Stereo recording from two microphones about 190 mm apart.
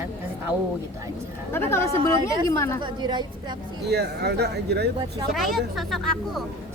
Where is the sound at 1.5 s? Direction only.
15° left (ahead or behind).